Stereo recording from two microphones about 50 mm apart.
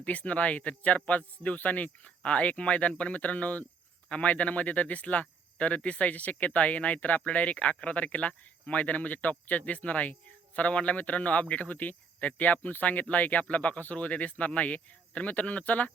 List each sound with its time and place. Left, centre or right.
0.0 s speech: left